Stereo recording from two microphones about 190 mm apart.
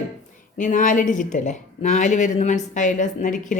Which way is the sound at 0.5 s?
45° left (ahead or behind).